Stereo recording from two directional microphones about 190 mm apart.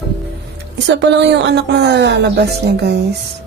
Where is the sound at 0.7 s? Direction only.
65° right (ahead or behind).